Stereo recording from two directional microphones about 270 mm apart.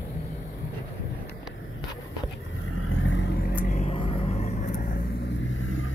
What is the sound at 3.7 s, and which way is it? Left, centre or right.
Vehicle, left.